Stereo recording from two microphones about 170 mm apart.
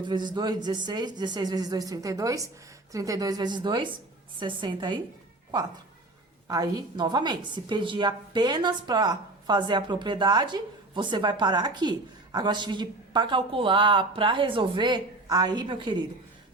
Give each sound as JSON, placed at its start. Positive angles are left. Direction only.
{"t": 0.0, "sound": "a woman's voice", "side_deg": -25}
{"t": 6.5, "sound": "a woman's voice", "side_deg": -25}